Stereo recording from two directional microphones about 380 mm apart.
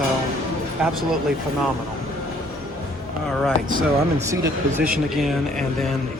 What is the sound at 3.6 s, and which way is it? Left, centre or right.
Speech, right.